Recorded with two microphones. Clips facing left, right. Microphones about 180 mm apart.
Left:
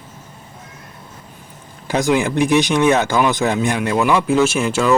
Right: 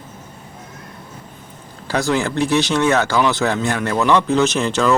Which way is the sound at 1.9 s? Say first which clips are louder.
Left 2 dB; 15° left (ahead or behind).